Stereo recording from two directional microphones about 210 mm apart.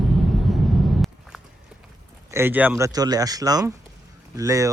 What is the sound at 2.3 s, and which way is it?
Speech, 10° right (ahead or behind).